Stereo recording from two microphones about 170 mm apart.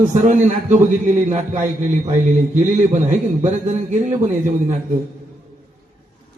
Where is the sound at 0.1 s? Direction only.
45° right (ahead or behind).